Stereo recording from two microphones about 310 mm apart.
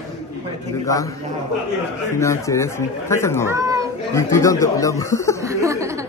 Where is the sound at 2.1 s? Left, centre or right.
Centre.